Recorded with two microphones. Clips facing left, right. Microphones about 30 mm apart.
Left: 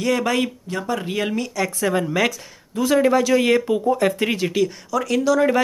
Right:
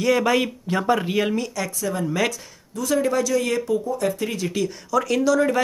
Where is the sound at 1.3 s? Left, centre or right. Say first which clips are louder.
Left 2 dB; centre.